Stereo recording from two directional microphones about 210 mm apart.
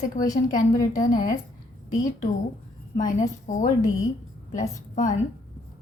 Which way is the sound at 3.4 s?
35° left (ahead or behind).